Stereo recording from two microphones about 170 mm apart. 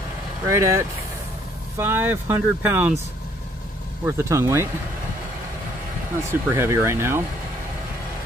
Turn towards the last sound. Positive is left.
turn(degrees=-15)  # may be behind; listen again after turning